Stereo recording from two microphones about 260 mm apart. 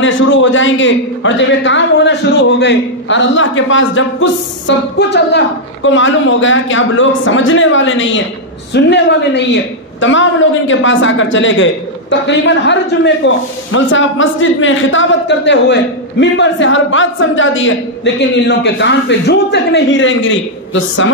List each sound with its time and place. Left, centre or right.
0.0 s a man's voice: left